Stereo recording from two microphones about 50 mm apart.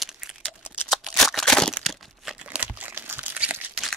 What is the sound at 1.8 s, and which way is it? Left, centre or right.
Crumpling, centre.